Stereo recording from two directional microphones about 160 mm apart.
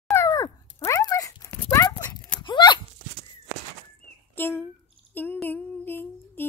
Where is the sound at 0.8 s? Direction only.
20° left (ahead or behind).